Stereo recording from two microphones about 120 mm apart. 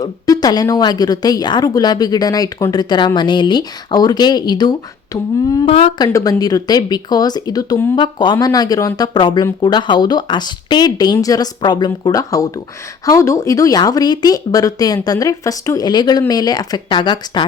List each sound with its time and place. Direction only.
0.0 s speech: 30° left (ahead or behind)
5.6 s speech: 60° left (ahead or behind)
6.0 s speech: 30° left (ahead or behind)